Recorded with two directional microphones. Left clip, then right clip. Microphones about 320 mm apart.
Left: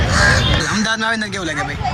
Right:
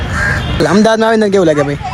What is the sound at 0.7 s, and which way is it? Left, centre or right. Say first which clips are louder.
Speech: right 8 dB; centre.